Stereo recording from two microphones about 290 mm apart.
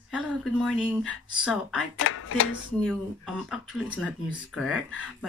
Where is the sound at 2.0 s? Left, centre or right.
Left.